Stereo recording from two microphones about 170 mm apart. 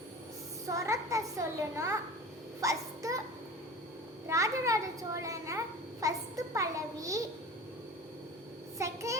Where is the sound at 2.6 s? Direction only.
20° right (ahead or behind).